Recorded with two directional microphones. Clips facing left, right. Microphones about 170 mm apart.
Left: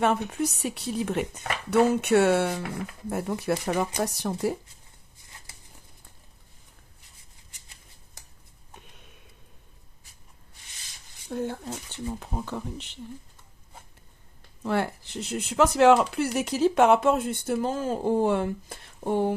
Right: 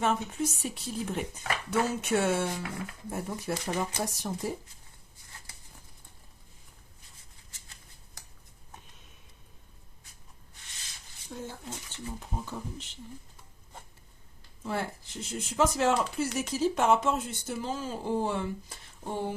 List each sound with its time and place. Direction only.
0.0 s speech: 65° left (ahead or behind)
11.3 s speech: 60° left (ahead or behind)
14.6 s speech: 70° left (ahead or behind)